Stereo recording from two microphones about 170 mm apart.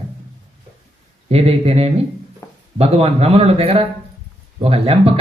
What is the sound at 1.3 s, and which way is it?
Speech, 35° right (ahead or behind).